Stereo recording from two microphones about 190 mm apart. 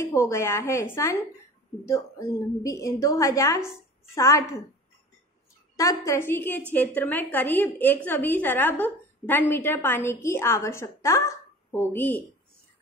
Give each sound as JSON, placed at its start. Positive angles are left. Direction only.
{"t": 0.0, "sound": "a woman's voice", "side_deg": 15}
{"t": 5.8, "sound": "a woman's voice", "side_deg": 15}